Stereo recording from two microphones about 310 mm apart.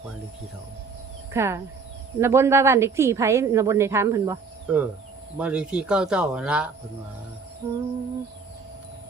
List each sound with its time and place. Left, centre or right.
1.3 s a woman's voice: centre